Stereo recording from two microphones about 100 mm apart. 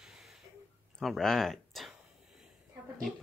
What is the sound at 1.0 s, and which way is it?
Speech, centre (ahead or behind).